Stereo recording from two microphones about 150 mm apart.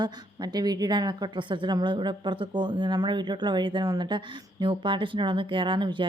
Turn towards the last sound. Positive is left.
turn(degrees=-30)  # may be behind; listen again after turning